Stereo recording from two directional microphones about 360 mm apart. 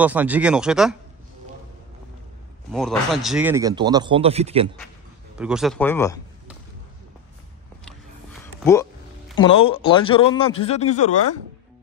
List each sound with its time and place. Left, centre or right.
0.0 s speech: centre
2.7 s speech: centre
5.4 s speech: centre
9.4 s speech: centre